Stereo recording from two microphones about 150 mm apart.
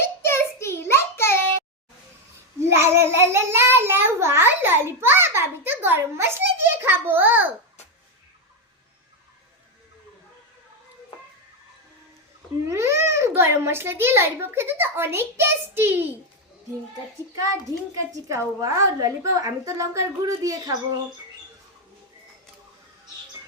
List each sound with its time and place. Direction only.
0.0 s child singing: 15° left (ahead or behind)
2.6 s child singing: 15° right (ahead or behind)
12.6 s a child's voice: 20° right (ahead or behind)
18.3 s a woman's voice: 20° right (ahead or behind)